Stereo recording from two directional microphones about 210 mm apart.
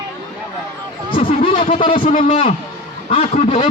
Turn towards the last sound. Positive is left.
turn(degrees=25)  # may be behind; listen again after turning